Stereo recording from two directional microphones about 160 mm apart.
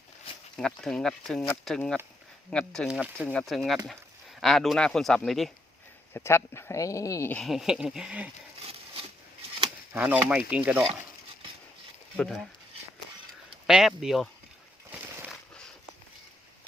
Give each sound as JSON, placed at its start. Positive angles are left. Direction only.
{"t": 0.5, "sound": "speech", "side_deg": 5}
{"t": 2.8, "sound": "speech", "side_deg": -5}
{"t": 6.1, "sound": "speech", "side_deg": 15}
{"t": 7.3, "sound": "speech", "side_deg": 0}
{"t": 9.9, "sound": "speech", "side_deg": -10}
{"t": 12.1, "sound": "speech", "side_deg": 5}
{"t": 13.7, "sound": "speech", "side_deg": -5}